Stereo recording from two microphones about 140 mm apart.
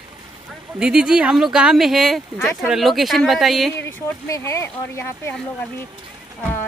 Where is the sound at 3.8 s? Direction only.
20° left (ahead or behind).